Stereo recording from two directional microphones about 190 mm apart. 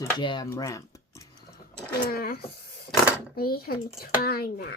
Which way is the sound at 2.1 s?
50° left (ahead or behind).